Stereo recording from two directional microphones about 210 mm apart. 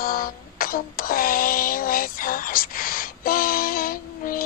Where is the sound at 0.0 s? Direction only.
45° left (ahead or behind).